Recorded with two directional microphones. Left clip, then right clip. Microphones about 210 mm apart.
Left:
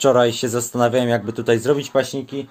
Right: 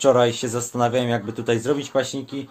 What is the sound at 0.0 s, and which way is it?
Speech, 30° left (ahead or behind).